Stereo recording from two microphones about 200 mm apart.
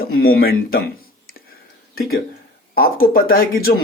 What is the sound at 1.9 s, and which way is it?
Speech, 50° left (ahead or behind).